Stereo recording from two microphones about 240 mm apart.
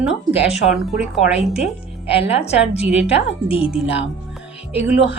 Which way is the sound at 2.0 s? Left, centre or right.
Left.